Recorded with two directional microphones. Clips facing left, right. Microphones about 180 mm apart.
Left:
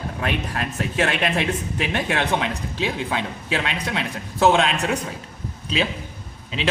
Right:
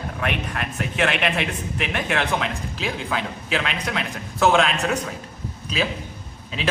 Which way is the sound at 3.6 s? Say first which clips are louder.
Left 1 dB; 30° left (ahead or behind).